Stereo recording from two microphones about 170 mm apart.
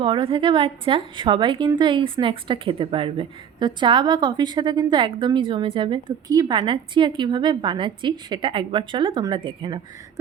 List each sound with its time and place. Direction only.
0.0 s a woman's voice: 30° right (ahead or behind)